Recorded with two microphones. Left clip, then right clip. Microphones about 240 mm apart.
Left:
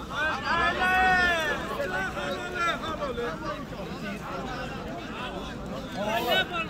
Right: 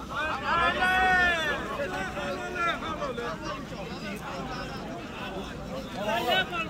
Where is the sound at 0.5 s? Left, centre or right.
Centre.